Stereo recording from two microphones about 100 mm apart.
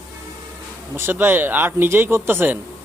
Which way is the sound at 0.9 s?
20° right (ahead or behind).